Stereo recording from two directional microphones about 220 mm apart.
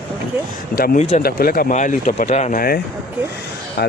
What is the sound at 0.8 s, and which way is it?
Speech, 30° left (ahead or behind).